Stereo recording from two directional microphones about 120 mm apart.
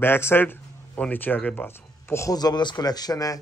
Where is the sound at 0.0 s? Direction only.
20° left (ahead or behind).